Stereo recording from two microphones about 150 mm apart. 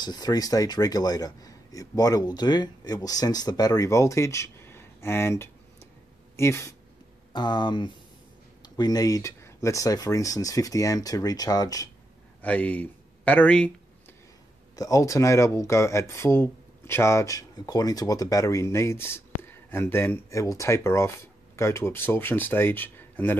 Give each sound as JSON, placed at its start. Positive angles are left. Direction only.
{"t": 0.0, "sound": "speech", "side_deg": 25}
{"t": 7.3, "sound": "speech", "side_deg": 30}
{"t": 12.4, "sound": "speech", "side_deg": 10}
{"t": 14.8, "sound": "speech", "side_deg": 20}